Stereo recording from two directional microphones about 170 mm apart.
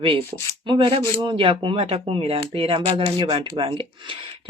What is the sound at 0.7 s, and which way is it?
Speech, 30° right (ahead or behind).